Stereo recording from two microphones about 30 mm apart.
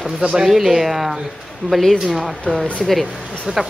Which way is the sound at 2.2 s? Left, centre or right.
Centre.